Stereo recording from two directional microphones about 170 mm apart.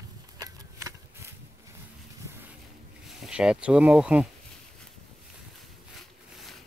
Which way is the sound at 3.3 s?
5° right (ahead or behind).